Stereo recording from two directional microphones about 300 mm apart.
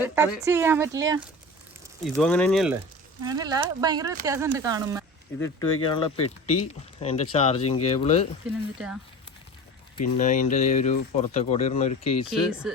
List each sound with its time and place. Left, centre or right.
0.4 s speech: centre
2.0 s speech: centre
3.2 s speech: centre
5.4 s speech: centre
8.4 s speech: centre
10.0 s speech: left
12.3 s speech: centre